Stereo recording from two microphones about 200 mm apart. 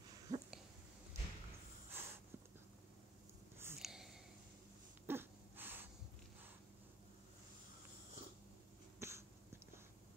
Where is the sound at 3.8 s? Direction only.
Centre (ahead or behind).